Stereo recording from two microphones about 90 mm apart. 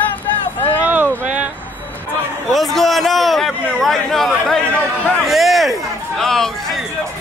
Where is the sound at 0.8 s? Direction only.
20° right (ahead or behind).